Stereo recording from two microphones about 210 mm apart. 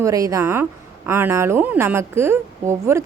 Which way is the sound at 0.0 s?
15° right (ahead or behind).